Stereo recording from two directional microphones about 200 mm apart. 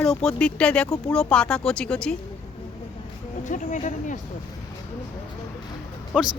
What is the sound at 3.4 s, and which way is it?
Speech, 40° left (ahead or behind).